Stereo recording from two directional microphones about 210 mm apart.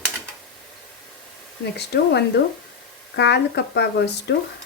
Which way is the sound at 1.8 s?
55° left (ahead or behind).